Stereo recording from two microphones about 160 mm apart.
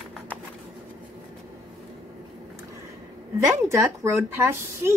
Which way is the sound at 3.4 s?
20° right (ahead or behind).